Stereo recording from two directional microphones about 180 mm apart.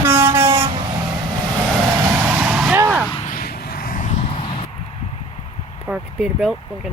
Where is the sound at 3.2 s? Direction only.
55° left (ahead or behind).